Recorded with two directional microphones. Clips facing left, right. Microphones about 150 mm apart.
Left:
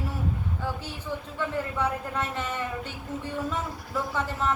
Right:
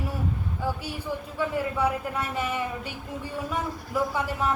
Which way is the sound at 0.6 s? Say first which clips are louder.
Right 6 dB; 10° right (ahead or behind).